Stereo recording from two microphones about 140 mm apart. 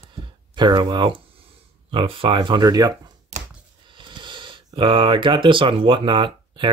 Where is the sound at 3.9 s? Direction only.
35° right (ahead or behind).